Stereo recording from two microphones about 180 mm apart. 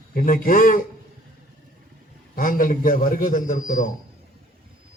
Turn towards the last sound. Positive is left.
turn(degrees=45)  # may be behind; listen again after turning